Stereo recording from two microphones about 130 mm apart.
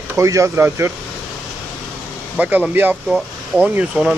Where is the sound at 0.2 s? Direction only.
25° right (ahead or behind).